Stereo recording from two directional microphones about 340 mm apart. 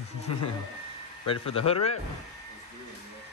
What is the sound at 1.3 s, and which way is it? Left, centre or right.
Speech, centre.